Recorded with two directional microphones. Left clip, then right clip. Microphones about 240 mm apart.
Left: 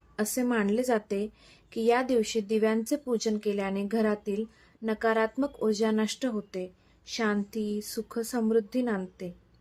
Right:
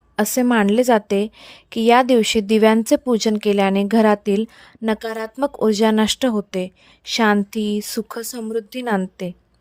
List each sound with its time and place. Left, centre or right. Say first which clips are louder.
0.2 s a woman's voice: right 11 dB; right